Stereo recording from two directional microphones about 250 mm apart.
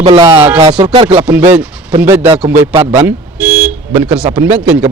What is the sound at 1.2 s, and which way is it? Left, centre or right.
Speech, centre.